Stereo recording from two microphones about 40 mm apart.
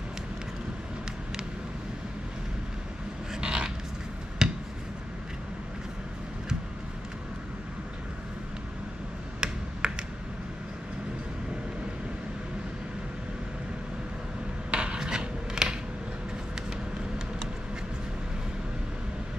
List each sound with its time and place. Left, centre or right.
3.3 s a sound: centre
9.4 s computer keyboard: centre
14.7 s filing: right